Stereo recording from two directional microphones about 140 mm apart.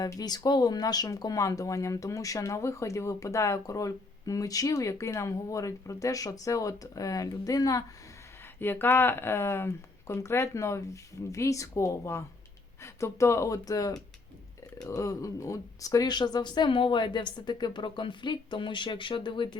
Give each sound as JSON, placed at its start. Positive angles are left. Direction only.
{"t": 0.0, "sound": "speech", "side_deg": 25}